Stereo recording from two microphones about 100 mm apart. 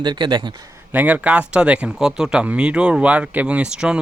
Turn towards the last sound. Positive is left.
turn(degrees=-10)  # may be behind; listen again after turning